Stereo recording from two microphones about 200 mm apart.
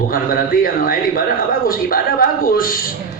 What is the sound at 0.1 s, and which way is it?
A man's voice, 45° left (ahead or behind).